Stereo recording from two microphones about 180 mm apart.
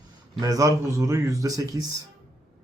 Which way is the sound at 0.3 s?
20° right (ahead or behind).